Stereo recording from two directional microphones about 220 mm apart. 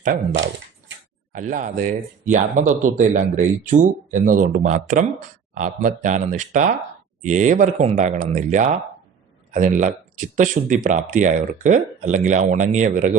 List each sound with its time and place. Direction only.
0.0 s speech: 35° right (ahead or behind)
0.3 s a sound: 55° right (ahead or behind)
1.3 s speech: 35° right (ahead or behind)